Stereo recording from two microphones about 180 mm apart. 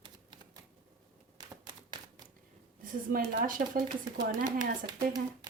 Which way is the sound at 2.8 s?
50° right (ahead or behind).